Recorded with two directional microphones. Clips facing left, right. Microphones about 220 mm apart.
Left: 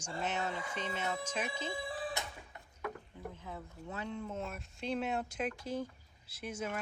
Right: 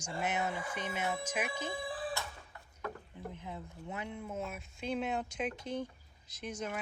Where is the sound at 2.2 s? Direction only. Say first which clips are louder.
Even; 20° left (ahead or behind).